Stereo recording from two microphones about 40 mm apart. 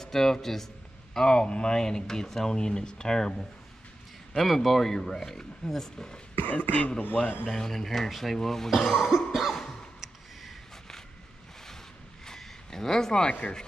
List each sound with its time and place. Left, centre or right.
0.0 s speech: centre
1.1 s speech: centre
4.4 s speech: centre
6.3 s speech: left
7.4 s speech: centre
8.6 s speech: centre
9.3 s cough: centre
9.9 s a sound: centre
12.3 s a sound: centre
13.3 s speech: left